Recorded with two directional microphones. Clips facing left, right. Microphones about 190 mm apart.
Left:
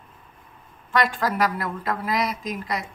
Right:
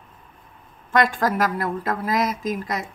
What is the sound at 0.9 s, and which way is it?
A woman's voice, 45° right (ahead or behind).